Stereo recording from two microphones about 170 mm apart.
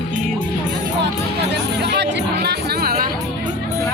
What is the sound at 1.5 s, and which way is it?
Music, 85° right.